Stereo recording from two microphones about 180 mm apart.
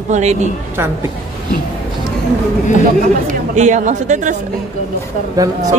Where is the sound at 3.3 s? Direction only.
40° right (ahead or behind).